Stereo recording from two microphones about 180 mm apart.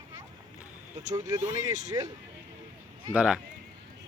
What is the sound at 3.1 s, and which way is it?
Speech, 5° right (ahead or behind).